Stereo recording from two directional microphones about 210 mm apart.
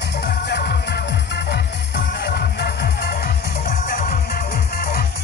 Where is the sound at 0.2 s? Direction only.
50° left (ahead or behind).